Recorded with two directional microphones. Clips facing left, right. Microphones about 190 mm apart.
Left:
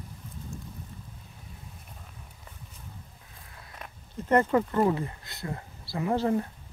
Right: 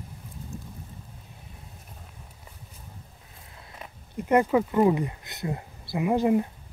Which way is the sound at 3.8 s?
10° right (ahead or behind).